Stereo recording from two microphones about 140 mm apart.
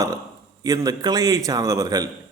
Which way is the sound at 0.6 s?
25° right (ahead or behind).